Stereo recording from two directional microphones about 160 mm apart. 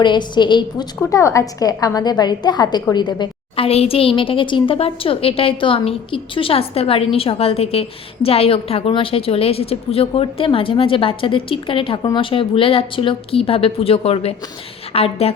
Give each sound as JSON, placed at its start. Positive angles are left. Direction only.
{"t": 0.0, "sound": "a woman's voice", "side_deg": 30}